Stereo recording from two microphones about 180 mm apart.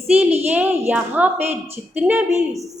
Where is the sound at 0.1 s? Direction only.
35° right (ahead or behind).